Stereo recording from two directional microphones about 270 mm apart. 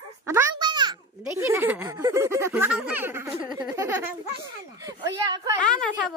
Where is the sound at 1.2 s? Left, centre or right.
Centre.